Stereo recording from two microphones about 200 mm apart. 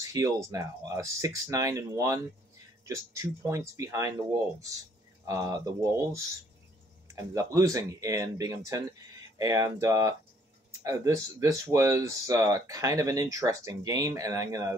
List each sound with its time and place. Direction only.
0.0 s speech: 15° right (ahead or behind)
5.2 s speech: 15° right (ahead or behind)
7.1 s speech: 15° right (ahead or behind)